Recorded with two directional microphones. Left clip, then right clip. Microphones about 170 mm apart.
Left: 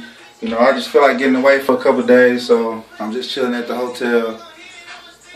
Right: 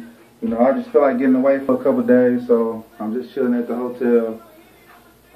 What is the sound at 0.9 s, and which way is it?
Speech, 25° left (ahead or behind).